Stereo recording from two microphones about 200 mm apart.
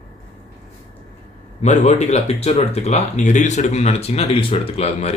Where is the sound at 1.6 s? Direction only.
35° left (ahead or behind).